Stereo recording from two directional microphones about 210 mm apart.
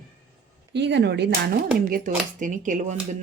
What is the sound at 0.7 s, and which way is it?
Speech, 55° right (ahead or behind).